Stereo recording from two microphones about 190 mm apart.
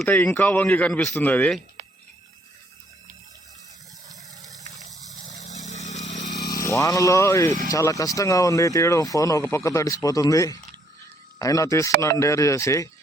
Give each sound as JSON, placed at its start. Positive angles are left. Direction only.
{"t": 0.0, "sound": "speech", "side_deg": 10}
{"t": 5.5, "sound": "a sound", "side_deg": 35}
{"t": 6.2, "sound": "speech", "side_deg": 20}